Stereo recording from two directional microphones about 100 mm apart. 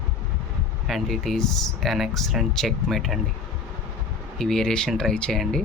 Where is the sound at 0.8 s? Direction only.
Centre (ahead or behind).